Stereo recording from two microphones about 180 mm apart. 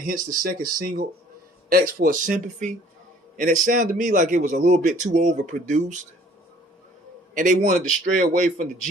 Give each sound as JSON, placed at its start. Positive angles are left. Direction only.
{"t": 0.1, "sound": "a man's voice", "side_deg": -50}
{"t": 7.3, "sound": "a man's voice", "side_deg": -45}